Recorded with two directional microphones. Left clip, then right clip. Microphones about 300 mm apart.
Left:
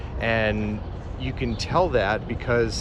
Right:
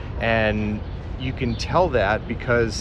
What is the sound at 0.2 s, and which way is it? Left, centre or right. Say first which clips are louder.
Speech: right 2 dB; centre.